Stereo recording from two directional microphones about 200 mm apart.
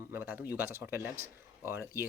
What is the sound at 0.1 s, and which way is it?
Speech, 10° right (ahead or behind).